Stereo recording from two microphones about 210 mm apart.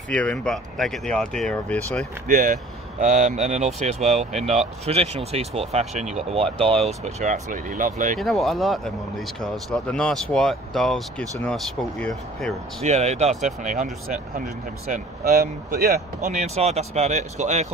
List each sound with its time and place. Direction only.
0.1 s speech: 5° left (ahead or behind)
2.2 s speech: 35° right (ahead or behind)
8.2 s speech: centre (ahead or behind)
12.8 s speech: 30° right (ahead or behind)
16.3 s speech: 30° right (ahead or behind)